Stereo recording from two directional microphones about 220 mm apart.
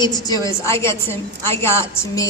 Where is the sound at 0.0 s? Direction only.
15° left (ahead or behind).